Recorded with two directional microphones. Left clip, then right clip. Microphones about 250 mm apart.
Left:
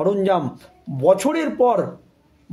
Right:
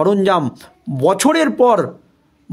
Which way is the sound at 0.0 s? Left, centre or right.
Right.